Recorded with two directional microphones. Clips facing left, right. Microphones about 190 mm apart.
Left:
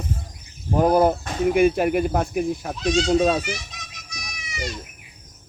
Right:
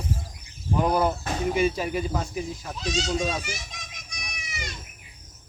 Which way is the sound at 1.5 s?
60° left (ahead or behind).